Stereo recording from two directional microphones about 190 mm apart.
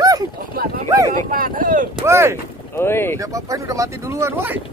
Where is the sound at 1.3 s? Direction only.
50° right (ahead or behind).